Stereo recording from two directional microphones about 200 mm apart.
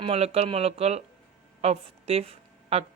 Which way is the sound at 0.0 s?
30° right (ahead or behind).